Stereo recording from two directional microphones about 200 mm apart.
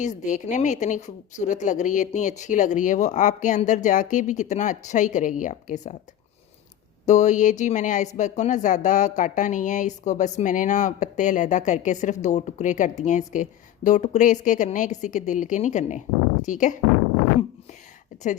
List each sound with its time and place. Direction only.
0.0 s speech: 40° left (ahead or behind)
7.0 s speech: 35° left (ahead or behind)